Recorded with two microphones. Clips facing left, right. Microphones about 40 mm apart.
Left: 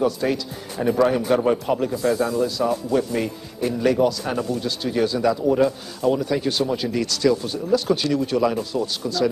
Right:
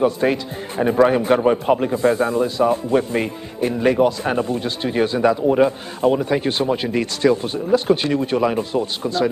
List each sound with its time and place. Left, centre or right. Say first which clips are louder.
0.0 s speech: right 4 dB; right